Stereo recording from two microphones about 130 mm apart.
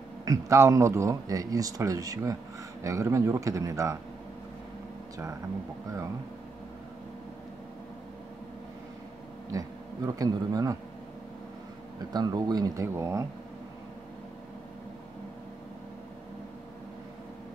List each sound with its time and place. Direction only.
0.2 s speech: 25° right (ahead or behind)
9.5 s speech: 25° right (ahead or behind)
12.1 s speech: 30° right (ahead or behind)